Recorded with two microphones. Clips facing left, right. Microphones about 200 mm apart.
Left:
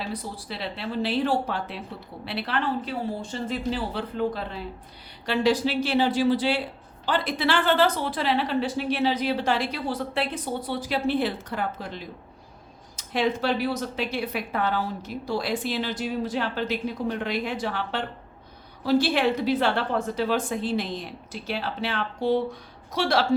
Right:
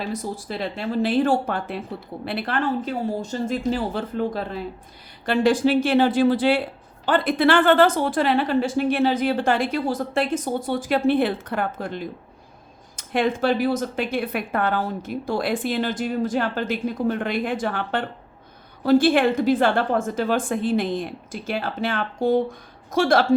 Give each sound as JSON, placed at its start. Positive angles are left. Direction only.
{"t": 0.1, "sound": "a woman's voice", "side_deg": -45}